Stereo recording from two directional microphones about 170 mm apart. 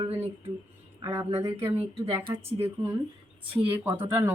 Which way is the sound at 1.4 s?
15° right (ahead or behind).